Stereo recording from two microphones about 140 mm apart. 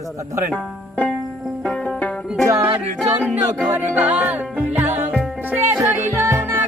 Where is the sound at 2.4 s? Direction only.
25° right (ahead or behind).